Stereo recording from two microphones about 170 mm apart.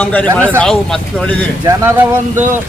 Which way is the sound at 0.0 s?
10° left (ahead or behind).